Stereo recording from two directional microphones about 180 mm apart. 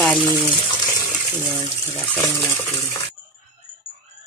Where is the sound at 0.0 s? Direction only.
10° left (ahead or behind).